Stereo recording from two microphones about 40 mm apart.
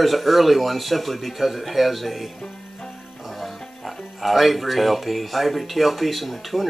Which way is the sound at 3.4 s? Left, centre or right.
Centre.